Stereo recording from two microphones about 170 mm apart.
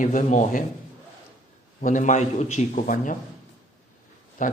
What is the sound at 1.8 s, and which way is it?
A man's voice, 50° left (ahead or behind).